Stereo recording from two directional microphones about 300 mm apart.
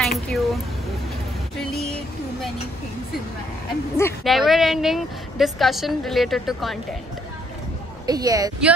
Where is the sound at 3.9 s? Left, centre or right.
Centre.